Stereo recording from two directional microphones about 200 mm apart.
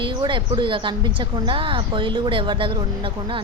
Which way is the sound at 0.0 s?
25° right (ahead or behind).